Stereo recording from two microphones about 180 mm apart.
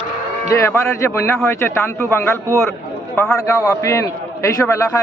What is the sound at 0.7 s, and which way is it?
A man's voice, 15° left (ahead or behind).